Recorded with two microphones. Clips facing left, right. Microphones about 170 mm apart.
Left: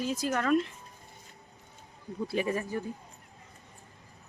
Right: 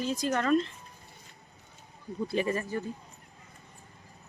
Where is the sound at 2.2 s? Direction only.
10° left (ahead or behind).